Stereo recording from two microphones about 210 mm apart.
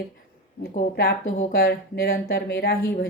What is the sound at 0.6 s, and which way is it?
Speech, 45° left (ahead or behind).